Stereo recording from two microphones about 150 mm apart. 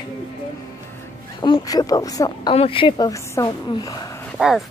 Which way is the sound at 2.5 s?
35° left (ahead or behind).